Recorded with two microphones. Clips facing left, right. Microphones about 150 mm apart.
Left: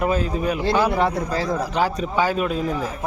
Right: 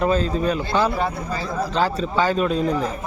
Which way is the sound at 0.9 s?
90° left.